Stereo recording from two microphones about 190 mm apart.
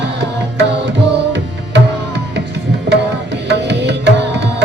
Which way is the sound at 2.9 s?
70° right (ahead or behind).